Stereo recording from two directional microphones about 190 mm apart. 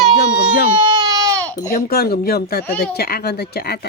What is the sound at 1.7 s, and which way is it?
Speech, 55° left (ahead or behind).